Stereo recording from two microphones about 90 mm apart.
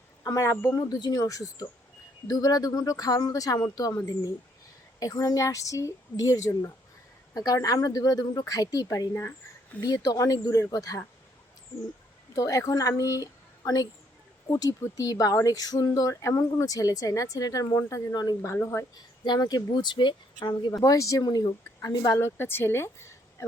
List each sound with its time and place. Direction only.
0.3 s speech: 35° left (ahead or behind)
0.8 s speech: 50° left (ahead or behind)
12.3 s speech: 40° left (ahead or behind)
14.4 s speech: 40° left (ahead or behind)
18.1 s speech: 45° left (ahead or behind)
18.4 s speech: 30° left (ahead or behind)
19.2 s speech: 50° left (ahead or behind)
20.7 s speech: 40° left (ahead or behind)
22.2 s speech: 25° left (ahead or behind)